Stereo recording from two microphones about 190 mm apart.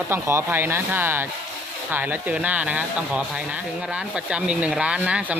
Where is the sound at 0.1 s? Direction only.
10° right (ahead or behind).